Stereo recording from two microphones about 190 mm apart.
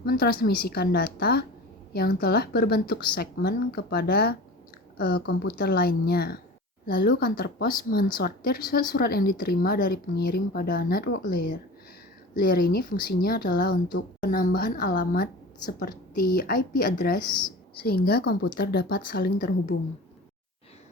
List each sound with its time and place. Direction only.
0.0 s a woman's voice: 50° left (ahead or behind)
14.3 s a woman's voice: 45° left (ahead or behind)